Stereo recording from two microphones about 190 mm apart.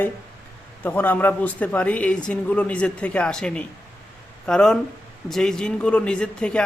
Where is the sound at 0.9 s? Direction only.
10° left (ahead or behind).